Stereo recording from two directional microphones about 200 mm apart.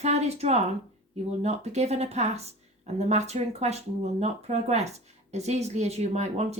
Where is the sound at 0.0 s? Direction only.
35° right (ahead or behind).